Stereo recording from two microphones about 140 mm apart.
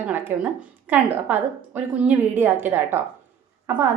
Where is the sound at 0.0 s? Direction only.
15° right (ahead or behind).